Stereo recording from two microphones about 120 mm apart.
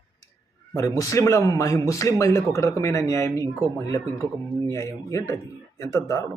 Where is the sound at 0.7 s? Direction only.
25° left (ahead or behind).